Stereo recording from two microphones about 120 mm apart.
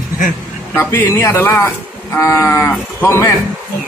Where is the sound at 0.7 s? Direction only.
20° left (ahead or behind).